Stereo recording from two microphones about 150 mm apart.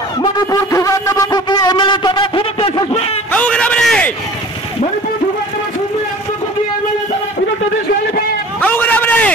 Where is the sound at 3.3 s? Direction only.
10° left (ahead or behind).